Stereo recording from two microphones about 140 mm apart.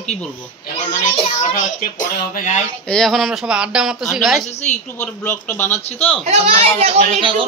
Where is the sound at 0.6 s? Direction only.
60° left (ahead or behind).